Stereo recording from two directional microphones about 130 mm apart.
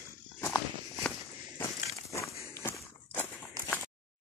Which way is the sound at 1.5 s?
25° left (ahead or behind).